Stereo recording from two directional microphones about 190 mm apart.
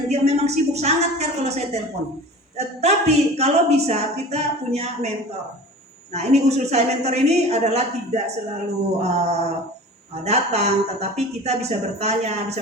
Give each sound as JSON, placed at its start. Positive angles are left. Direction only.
{"t": 0.1, "sound": "a woman's voice", "side_deg": -35}
{"t": 6.1, "sound": "a woman's voice", "side_deg": -35}